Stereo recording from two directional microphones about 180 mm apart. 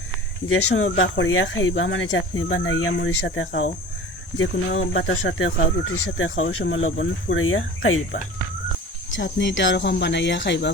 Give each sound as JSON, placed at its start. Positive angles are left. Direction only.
{"t": 0.4, "sound": "speech", "side_deg": 90}